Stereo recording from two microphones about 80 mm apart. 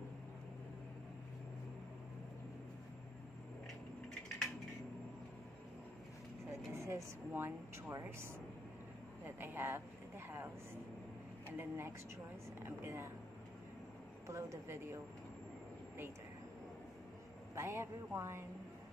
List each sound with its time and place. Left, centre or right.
6.7 s a woman's voice: right
9.2 s a sound: right
11.5 s a woman's voice: right
14.2 s a woman's voice: right
17.6 s a woman's voice: right